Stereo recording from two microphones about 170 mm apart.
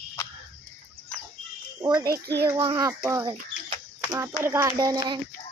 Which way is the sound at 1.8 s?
20° right (ahead or behind).